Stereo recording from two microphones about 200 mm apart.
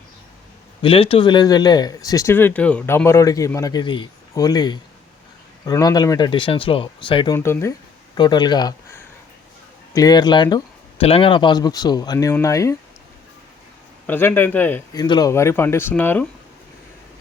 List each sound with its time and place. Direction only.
0.8 s speech: 25° left (ahead or behind)
7.3 s speech: 10° left (ahead or behind)
14.1 s speech: 10° left (ahead or behind)
15.0 s speech: 20° left (ahead or behind)